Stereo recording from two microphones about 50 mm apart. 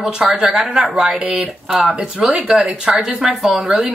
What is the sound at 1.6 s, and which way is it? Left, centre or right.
Speech, centre.